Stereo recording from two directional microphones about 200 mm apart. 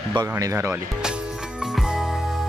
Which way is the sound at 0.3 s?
15° right (ahead or behind).